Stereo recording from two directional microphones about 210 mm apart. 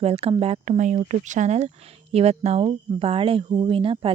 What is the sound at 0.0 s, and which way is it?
Speech, 30° right (ahead or behind).